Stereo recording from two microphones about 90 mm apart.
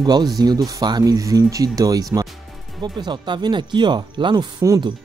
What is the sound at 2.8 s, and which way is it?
Speech, 55° right (ahead or behind).